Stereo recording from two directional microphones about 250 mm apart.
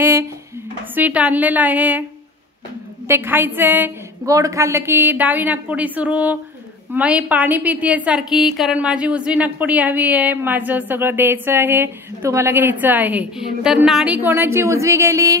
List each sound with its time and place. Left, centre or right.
0.0 s dishes: centre
0.9 s a woman's voice: centre
3.1 s a woman's voice: centre